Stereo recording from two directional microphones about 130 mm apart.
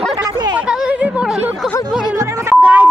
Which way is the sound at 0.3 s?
30° right (ahead or behind).